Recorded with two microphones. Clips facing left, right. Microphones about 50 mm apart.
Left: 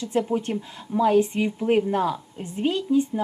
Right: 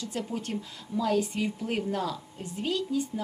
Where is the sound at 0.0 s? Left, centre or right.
Left.